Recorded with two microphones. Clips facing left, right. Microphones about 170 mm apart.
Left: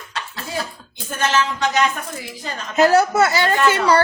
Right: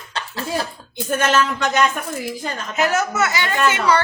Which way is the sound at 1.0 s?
50° right (ahead or behind).